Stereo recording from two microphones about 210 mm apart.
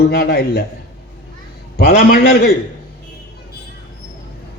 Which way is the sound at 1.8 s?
45° left (ahead or behind).